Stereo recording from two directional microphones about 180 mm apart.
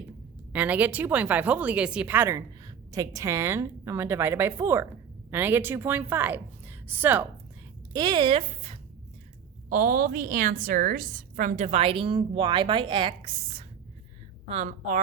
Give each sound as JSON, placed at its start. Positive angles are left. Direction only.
{"t": 0.5, "sound": "a woman's voice", "side_deg": -10}
{"t": 7.9, "sound": "speech", "side_deg": -25}
{"t": 9.6, "sound": "a woman's voice", "side_deg": -50}